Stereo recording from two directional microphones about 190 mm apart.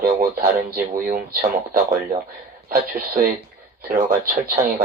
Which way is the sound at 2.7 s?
45° right (ahead or behind).